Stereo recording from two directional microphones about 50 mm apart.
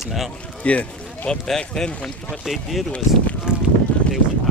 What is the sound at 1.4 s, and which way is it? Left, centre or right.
Speech, centre.